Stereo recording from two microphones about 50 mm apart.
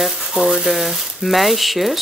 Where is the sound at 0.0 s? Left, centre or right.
Centre.